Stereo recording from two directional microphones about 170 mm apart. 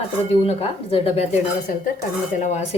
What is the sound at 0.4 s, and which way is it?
Speech, 35° left (ahead or behind).